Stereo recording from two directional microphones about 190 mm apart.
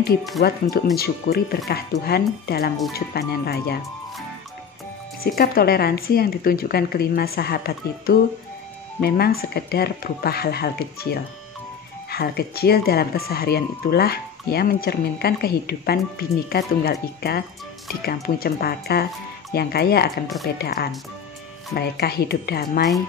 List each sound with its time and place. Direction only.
0.4 s speech: 55° left (ahead or behind)
5.2 s speech: 50° left (ahead or behind)
12.1 s speech: 55° left (ahead or behind)